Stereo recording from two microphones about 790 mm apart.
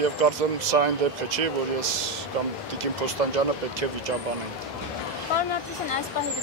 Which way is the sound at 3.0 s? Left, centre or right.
Right.